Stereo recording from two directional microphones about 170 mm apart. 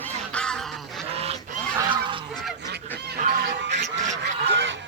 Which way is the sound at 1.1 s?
35° right (ahead or behind).